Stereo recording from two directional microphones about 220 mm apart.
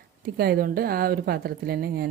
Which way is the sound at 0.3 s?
45° right (ahead or behind).